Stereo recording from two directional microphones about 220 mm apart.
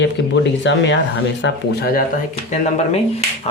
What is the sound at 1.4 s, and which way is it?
Speech, 45° left (ahead or behind).